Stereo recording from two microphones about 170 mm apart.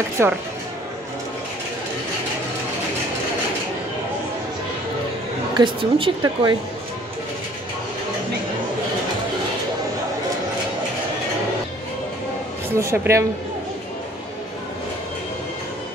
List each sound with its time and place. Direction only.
0.2 s speech: 15° right (ahead or behind)
5.6 s a woman's voice: 30° right (ahead or behind)
12.7 s speech: 15° right (ahead or behind)